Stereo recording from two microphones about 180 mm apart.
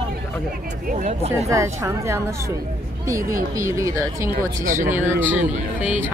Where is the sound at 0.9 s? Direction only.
40° right (ahead or behind).